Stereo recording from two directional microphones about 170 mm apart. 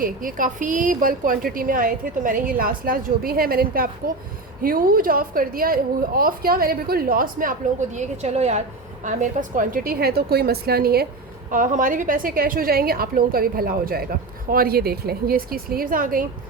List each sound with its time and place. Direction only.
0.0 s a woman's voice: 55° right (ahead or behind)
7.9 s a woman's voice: 40° right (ahead or behind); by 11.0 s 65° right (ahead or behind)
11.5 s a woman's voice: 50° right (ahead or behind)